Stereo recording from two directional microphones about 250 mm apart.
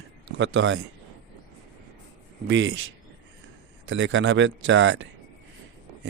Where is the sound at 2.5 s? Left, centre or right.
Right.